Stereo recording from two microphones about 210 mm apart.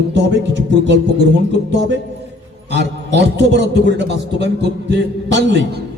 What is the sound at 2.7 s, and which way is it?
A man's voice, 55° right (ahead or behind).